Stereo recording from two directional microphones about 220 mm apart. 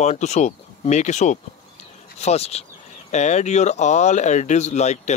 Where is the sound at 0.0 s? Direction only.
30° left (ahead or behind).